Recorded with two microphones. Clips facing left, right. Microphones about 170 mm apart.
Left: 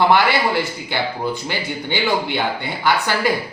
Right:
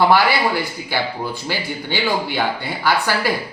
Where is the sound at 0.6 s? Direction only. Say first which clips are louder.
Even; 20° left (ahead or behind).